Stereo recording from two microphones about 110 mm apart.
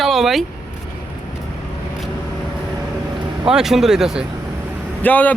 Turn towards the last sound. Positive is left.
turn(degrees=15)  # may be behind; listen again after turning